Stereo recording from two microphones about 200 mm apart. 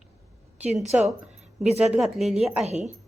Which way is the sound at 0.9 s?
5° right (ahead or behind).